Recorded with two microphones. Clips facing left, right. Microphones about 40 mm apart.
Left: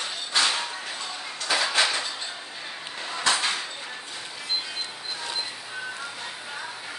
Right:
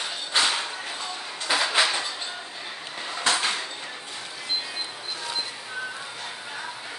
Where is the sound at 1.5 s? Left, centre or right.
Centre.